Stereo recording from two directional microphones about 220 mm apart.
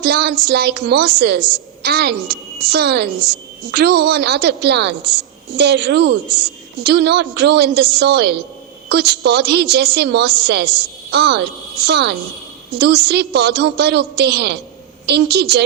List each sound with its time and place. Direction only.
0.0 s a woman's voice: 45° right (ahead or behind)